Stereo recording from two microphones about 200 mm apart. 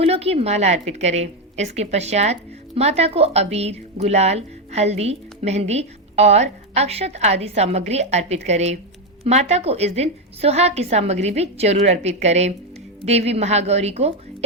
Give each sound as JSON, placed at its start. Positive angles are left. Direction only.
{"t": 0.0, "sound": "a woman's voice", "side_deg": -30}